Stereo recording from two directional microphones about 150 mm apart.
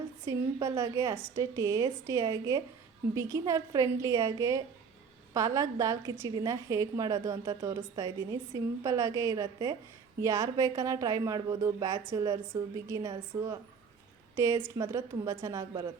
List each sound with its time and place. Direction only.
0.3 s a woman's voice: 20° right (ahead or behind)